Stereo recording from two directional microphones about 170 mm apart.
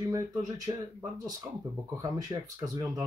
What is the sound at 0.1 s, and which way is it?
Speech, 20° right (ahead or behind).